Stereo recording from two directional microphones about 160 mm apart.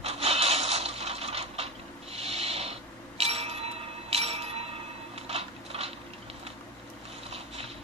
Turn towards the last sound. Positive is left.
turn(degrees=-40)  # may be behind; listen again after turning